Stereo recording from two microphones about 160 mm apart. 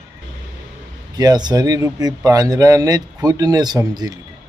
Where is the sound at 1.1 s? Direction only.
25° right (ahead or behind).